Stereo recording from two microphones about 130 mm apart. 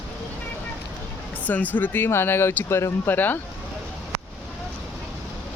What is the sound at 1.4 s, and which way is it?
Speech, 10° left (ahead or behind).